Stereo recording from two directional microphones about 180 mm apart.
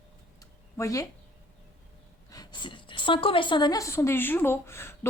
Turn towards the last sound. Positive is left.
turn(degrees=15)  # may be behind; listen again after turning